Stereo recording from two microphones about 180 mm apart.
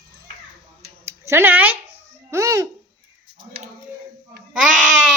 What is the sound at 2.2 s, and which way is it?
Babbling, 15° right (ahead or behind).